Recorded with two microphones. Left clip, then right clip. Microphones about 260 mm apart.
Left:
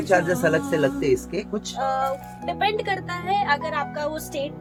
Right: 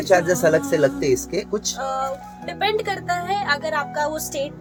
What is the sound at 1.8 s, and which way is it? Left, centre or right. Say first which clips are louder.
Speech: left 1 dB; centre.